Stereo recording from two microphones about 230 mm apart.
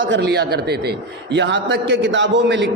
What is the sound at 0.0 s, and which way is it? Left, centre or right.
A man's voice, right.